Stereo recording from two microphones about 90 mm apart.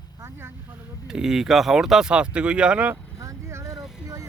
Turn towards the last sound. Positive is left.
turn(degrees=-5)  # may be behind; listen again after turning